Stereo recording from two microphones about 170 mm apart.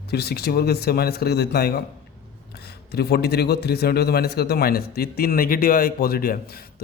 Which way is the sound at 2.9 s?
70° left (ahead or behind).